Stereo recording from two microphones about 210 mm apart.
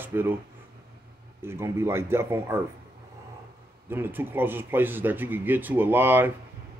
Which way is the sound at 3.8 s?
10° right (ahead or behind).